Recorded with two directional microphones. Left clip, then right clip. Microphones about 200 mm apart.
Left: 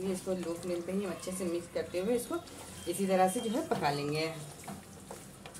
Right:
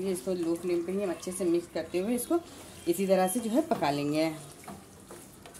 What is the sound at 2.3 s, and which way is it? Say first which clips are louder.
Speech: right 8 dB; 55° right (ahead or behind).